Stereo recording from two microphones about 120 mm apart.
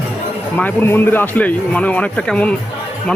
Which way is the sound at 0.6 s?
15° left (ahead or behind).